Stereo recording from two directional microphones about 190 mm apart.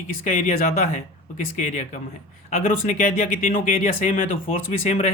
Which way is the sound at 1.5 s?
40° left (ahead or behind).